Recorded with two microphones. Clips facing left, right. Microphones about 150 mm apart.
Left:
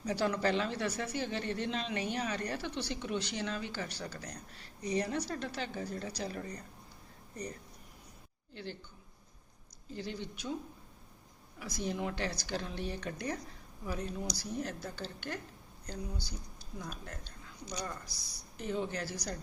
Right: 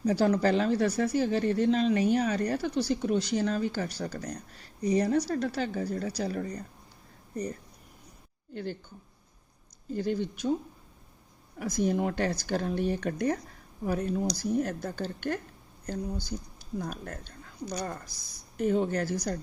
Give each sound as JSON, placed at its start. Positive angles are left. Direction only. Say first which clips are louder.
{"t": 0.0, "sound": "speech", "louder": "right 7 dB", "side_deg": -40}
{"t": 9.9, "sound": "speech", "louder": "right 11 dB", "side_deg": -50}
{"t": 11.6, "sound": "speech", "louder": "right 9 dB", "side_deg": -50}